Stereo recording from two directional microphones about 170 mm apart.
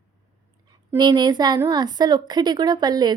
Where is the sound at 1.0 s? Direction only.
25° right (ahead or behind).